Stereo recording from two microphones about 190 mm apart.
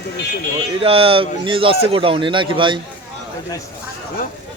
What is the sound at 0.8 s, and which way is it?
A man's voice, 30° right (ahead or behind).